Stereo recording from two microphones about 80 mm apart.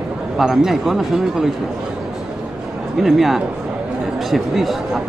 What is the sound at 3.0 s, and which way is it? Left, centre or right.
Speech, centre.